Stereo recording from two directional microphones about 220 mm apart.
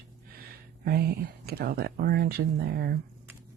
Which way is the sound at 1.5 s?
45° right (ahead or behind).